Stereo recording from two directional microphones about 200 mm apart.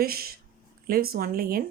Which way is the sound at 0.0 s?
50° right (ahead or behind).